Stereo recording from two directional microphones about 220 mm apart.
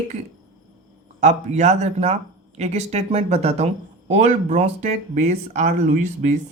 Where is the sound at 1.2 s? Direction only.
30° right (ahead or behind).